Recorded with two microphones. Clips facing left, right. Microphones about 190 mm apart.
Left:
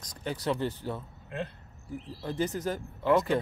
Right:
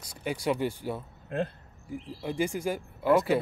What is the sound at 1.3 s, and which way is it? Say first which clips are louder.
Speech: right 6 dB; 50° right (ahead or behind).